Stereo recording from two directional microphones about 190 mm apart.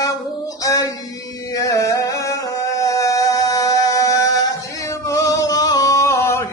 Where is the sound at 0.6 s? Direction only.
15° left (ahead or behind).